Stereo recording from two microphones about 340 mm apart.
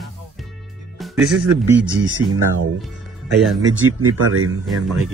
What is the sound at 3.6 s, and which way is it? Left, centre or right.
Speech, right.